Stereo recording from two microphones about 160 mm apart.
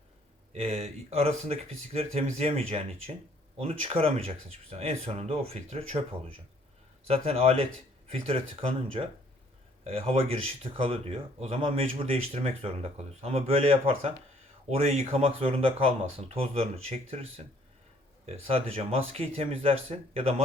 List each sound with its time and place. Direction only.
0.5 s speech: 40° right (ahead or behind)